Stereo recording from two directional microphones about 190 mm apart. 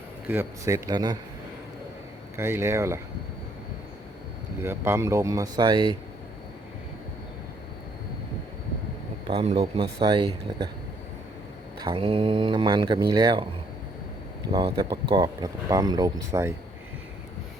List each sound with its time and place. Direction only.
0.3 s speech: 15° right (ahead or behind)
2.4 s speech: 15° right (ahead or behind)
4.6 s speech: 15° right (ahead or behind)
9.2 s speech: 30° right (ahead or behind)
11.8 s speech: 25° right (ahead or behind)
14.5 s speech: 20° right (ahead or behind)